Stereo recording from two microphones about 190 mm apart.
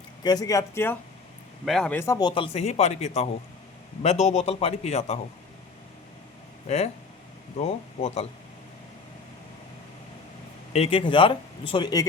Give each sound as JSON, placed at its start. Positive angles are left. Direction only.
{"t": 0.2, "sound": "a man's voice", "side_deg": 20}
{"t": 6.7, "sound": "a man's voice", "side_deg": 35}
{"t": 10.7, "sound": "speech", "side_deg": 30}